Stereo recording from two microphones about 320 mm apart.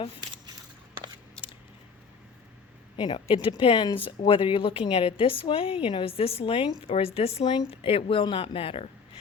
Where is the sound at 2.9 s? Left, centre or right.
Centre.